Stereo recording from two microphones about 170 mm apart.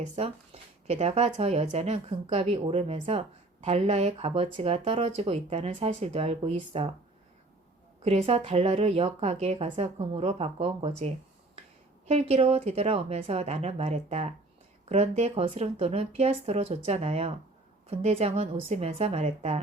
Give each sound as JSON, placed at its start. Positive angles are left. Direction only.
{"t": 0.0, "sound": "speech", "side_deg": -35}
{"t": 8.0, "sound": "speech", "side_deg": -35}